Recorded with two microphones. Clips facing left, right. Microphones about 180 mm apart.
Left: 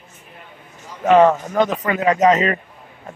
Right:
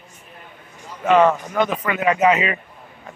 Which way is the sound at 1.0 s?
35° left (ahead or behind).